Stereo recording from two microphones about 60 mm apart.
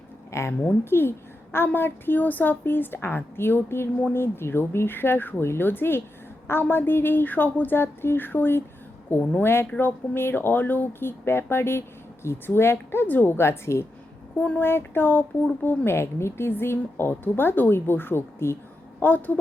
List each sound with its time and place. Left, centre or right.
0.3 s speech: left
0.5 s a woman's voice: left
0.9 s speech: left
14.3 s a woman's voice: left
14.6 s speech: left
18.9 s speech: left